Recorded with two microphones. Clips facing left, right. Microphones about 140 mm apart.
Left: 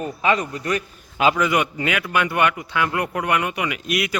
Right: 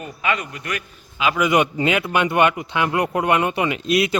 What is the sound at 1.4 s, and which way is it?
Speech, 20° right (ahead or behind).